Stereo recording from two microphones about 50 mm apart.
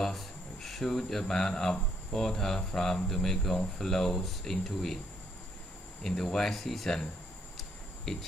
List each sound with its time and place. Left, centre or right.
0.0 s speech: centre
6.0 s speech: centre
7.5 s a sound: centre